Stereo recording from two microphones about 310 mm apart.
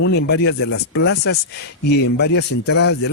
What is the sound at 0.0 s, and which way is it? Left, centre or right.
Speech, left.